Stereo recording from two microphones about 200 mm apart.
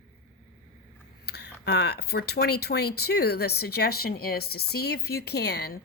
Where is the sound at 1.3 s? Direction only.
55° left (ahead or behind).